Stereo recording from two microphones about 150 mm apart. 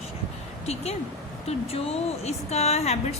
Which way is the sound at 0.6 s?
45° left (ahead or behind).